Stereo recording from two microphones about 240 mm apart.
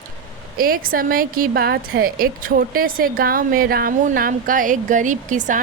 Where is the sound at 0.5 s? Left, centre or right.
Right.